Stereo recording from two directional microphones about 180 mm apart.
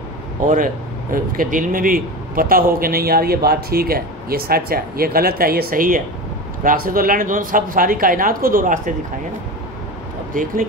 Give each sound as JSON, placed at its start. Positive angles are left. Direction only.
{"t": 1.1, "sound": "a man's voice", "side_deg": -50}
{"t": 10.3, "sound": "speech", "side_deg": -50}